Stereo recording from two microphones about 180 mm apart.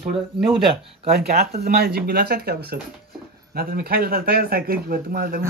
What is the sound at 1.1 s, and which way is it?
Speech, 60° right (ahead or behind).